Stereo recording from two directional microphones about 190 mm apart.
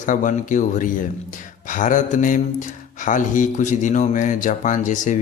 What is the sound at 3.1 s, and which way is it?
Speech, 40° left (ahead or behind).